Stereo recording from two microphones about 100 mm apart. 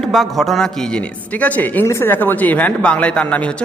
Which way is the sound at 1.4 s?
15° left (ahead or behind).